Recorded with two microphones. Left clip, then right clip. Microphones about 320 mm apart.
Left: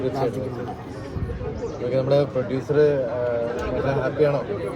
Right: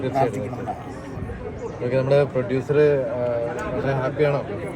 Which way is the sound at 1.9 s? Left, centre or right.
Right.